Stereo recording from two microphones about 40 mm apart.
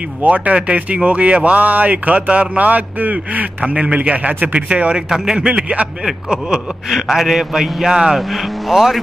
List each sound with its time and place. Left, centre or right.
0.3 s speech: right
3.7 s speech: right
4.6 s speech: right
5.1 s a man's voice: centre
8.2 s speech: centre